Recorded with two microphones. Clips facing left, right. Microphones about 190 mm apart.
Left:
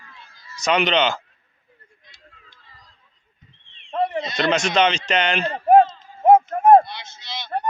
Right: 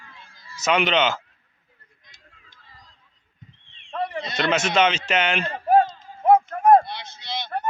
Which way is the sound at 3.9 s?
25° left (ahead or behind).